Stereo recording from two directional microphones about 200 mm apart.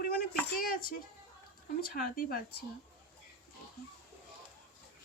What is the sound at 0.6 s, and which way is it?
A child's voice, 45° left (ahead or behind).